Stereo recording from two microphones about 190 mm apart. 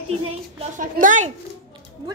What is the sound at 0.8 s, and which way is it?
Speech, 40° right (ahead or behind).